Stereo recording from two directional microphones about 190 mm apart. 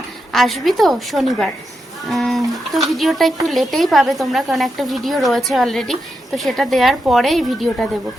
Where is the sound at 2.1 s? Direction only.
Centre (ahead or behind).